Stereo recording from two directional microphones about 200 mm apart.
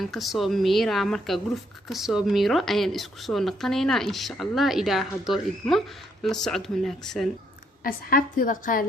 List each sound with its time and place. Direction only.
0.0 s a woman's voice: centre (ahead or behind)
7.9 s a woman's voice: 45° left (ahead or behind)